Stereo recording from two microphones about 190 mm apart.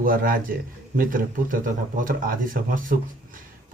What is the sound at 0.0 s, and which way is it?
A man's voice, 50° right (ahead or behind).